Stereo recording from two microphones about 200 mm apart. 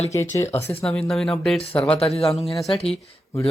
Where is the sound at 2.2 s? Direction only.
30° left (ahead or behind).